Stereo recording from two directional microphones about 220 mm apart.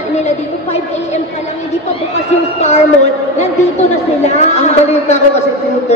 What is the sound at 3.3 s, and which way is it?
A woman's voice, 30° left (ahead or behind).